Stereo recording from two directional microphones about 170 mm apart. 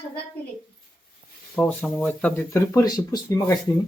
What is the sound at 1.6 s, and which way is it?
Speech, 10° left (ahead or behind).